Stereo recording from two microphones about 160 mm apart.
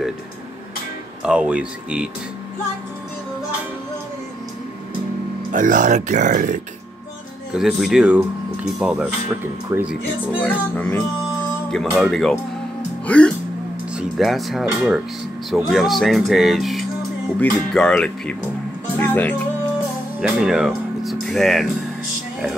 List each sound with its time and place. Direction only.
1.2 s speech: 5° right (ahead or behind)
5.5 s speech: 55° right (ahead or behind)
7.5 s speech: centre (ahead or behind)
10.4 s music: 10° left (ahead or behind)
12.0 s speech: centre (ahead or behind)
18.9 s music: 10° left (ahead or behind)
20.2 s speech: 5° right (ahead or behind)